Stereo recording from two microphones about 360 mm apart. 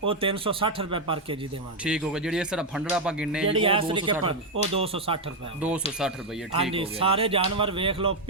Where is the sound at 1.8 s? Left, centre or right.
Centre.